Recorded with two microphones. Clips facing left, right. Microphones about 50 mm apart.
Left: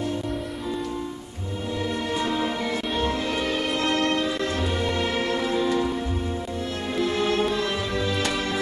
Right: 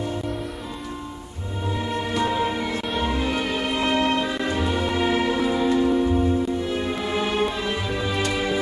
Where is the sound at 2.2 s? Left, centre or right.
Centre.